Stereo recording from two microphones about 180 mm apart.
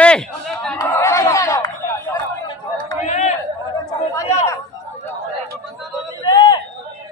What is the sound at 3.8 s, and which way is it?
Chatter, 15° left (ahead or behind).